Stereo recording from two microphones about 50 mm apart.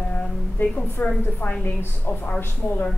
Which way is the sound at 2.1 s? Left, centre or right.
Left.